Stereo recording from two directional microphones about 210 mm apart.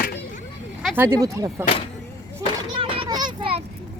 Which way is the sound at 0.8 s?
10° right (ahead or behind).